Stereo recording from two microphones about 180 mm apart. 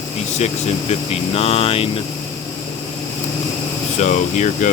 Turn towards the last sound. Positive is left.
turn(degrees=40)  # may be behind; listen again after turning